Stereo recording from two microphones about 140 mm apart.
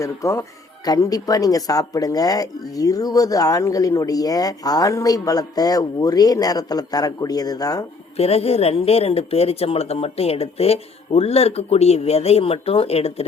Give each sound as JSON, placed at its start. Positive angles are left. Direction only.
{"t": 0.0, "sound": "speech", "side_deg": 20}
{"t": 8.1, "sound": "speech", "side_deg": 45}